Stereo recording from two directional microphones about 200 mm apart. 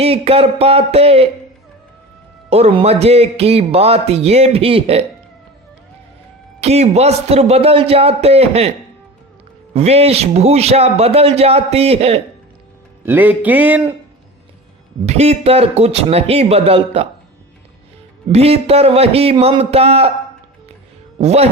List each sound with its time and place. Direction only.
0.0 s speech: 30° right (ahead or behind)
2.5 s speech: 30° right (ahead or behind)
6.6 s speech: 30° right (ahead or behind)
9.7 s speech: 30° right (ahead or behind)
13.1 s a sound: 10° right (ahead or behind)
15.0 s speech: 30° right (ahead or behind)
18.3 s speech: 30° right (ahead or behind)
21.2 s speech: 30° right (ahead or behind)